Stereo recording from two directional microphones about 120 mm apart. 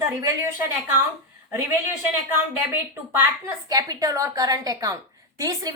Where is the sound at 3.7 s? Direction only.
30° right (ahead or behind).